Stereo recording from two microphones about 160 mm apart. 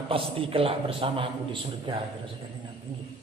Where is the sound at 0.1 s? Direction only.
35° right (ahead or behind).